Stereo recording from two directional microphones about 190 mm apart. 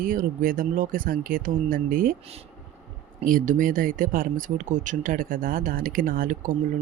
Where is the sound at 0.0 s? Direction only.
45° right (ahead or behind).